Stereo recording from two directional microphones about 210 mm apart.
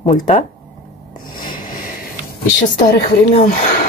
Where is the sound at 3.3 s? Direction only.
35° left (ahead or behind).